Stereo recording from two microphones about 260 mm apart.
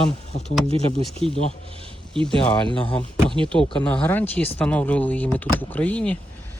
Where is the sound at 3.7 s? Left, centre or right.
Centre.